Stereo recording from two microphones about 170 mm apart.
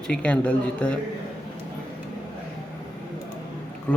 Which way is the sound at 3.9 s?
10° left (ahead or behind).